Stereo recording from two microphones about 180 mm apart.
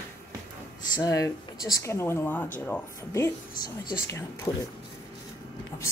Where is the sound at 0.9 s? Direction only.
20° left (ahead or behind).